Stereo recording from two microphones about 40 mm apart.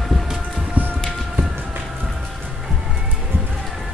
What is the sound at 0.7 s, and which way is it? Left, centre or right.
Music, right.